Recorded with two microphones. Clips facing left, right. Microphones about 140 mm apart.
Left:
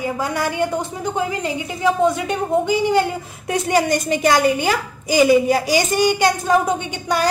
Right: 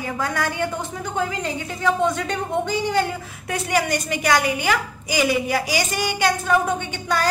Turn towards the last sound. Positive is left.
turn(degrees=15)  # may be behind; listen again after turning